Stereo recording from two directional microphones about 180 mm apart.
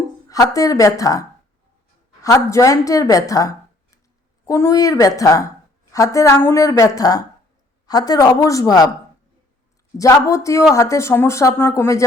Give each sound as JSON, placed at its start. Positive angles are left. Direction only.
{"t": 0.3, "sound": "speech", "side_deg": 20}
{"t": 2.2, "sound": "speech", "side_deg": 15}
{"t": 10.0, "sound": "speech", "side_deg": 15}